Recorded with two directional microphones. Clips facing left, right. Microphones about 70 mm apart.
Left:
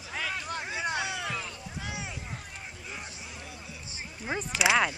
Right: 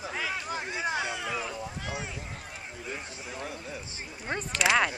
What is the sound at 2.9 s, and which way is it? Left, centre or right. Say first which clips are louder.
Vehicle: right 5 dB; right.